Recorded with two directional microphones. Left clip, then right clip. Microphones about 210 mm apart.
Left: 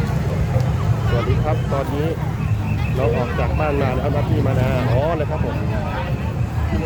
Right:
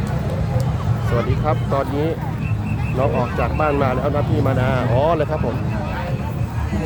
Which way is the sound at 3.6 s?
25° right (ahead or behind).